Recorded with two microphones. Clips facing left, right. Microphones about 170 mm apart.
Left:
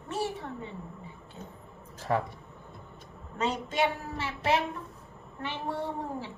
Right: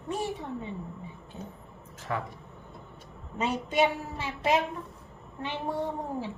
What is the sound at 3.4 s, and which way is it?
A woman's voice, 15° right (ahead or behind).